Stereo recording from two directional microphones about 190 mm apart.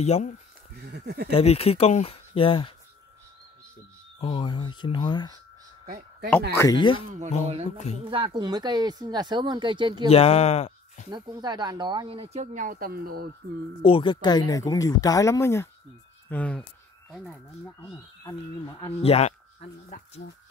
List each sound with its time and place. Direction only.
0.0 s speech: 35° left (ahead or behind)
0.9 s speech: 60° right (ahead or behind)
1.3 s speech: 30° left (ahead or behind)
4.2 s speech: 25° left (ahead or behind)
5.9 s a sound: 50° right (ahead or behind)
6.5 s speech: 15° left (ahead or behind)
7.7 s speech: 35° left (ahead or behind)
8.0 s speech: 25° right (ahead or behind)
10.0 s speech: 30° left (ahead or behind)
11.1 s speech: 25° right (ahead or behind); by 13.3 s 50° right (ahead or behind)
13.8 s speech: 25° left (ahead or behind); by 16.6 s 10° left (ahead or behind)
17.1 s speech: 5° right (ahead or behind)
19.0 s speech: 35° left (ahead or behind)